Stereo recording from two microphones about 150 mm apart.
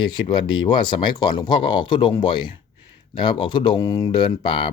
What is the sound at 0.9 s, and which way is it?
Speech, 30° left (ahead or behind).